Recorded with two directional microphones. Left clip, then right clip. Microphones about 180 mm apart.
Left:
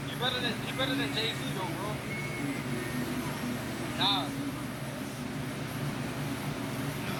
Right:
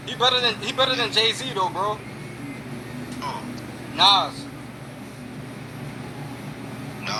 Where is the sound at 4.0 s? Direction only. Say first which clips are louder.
Right 13 dB; 45° right (ahead or behind).